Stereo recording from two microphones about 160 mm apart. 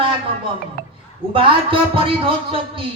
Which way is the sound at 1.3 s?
35° right (ahead or behind).